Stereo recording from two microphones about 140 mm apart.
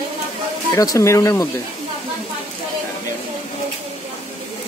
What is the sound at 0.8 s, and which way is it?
Speech, 25° left (ahead or behind).